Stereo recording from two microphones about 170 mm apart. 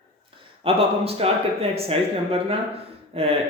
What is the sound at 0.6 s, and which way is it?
A man's voice, 35° right (ahead or behind).